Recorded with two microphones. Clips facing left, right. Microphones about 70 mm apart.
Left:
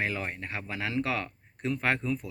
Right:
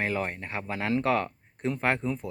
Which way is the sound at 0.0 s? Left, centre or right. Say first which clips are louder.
Right 3 dB; right.